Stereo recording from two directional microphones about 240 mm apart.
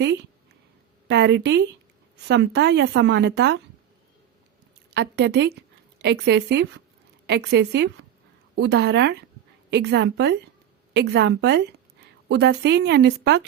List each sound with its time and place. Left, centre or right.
1.0 s a woman's voice: right
4.9 s a woman's voice: right